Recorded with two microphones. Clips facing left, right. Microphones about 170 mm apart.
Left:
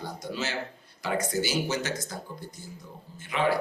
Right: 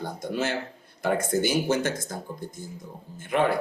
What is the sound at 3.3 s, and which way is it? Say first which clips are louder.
Speech: right 5 dB; 50° right (ahead or behind).